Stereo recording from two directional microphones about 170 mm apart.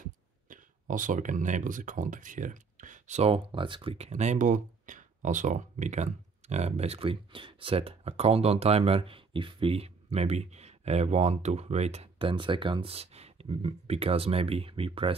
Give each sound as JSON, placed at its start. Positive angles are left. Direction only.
{"t": 0.5, "sound": "speech", "side_deg": -50}